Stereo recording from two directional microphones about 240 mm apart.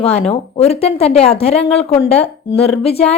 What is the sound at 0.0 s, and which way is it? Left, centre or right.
Speech, left.